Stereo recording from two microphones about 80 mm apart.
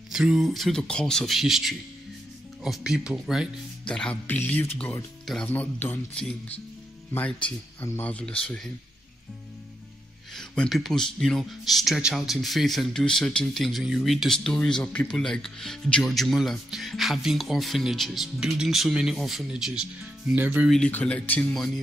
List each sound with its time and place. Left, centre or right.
0.1 s speech: centre
3.8 s speech: centre
4.3 s speech: left
5.2 s speech: centre
5.5 s speech: left
7.2 s speech: centre
10.3 s a sound: centre
10.7 s speech: centre
20.3 s speech: right
20.9 s speech: centre
21.5 s speech: centre